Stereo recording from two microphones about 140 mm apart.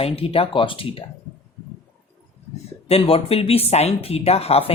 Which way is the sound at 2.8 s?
45° left (ahead or behind).